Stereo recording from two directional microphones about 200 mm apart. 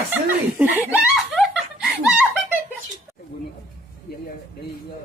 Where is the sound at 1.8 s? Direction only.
5° right (ahead or behind).